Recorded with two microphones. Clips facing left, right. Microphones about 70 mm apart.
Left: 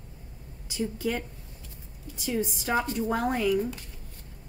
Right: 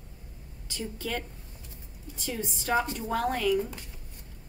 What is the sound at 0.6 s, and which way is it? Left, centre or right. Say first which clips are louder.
A woman's voice: left 5 dB; centre.